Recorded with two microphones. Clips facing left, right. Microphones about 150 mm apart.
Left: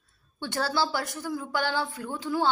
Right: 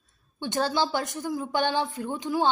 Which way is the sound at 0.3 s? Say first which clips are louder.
Right 2 dB; 20° right (ahead or behind).